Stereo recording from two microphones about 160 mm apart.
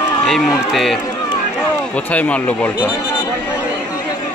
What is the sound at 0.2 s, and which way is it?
Run, centre (ahead or behind).